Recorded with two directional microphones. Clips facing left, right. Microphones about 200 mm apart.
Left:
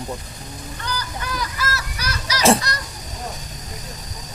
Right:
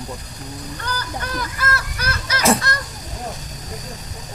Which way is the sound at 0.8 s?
55° right (ahead or behind).